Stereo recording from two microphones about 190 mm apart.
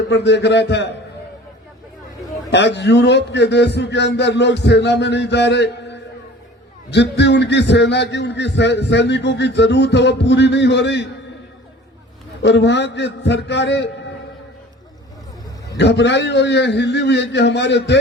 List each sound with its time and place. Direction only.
0.1 s a man's voice: 65° left (ahead or behind)
2.5 s a man's voice: 65° left (ahead or behind)
12.4 s a man's voice: 65° left (ahead or behind)
15.8 s a man's voice: 65° left (ahead or behind)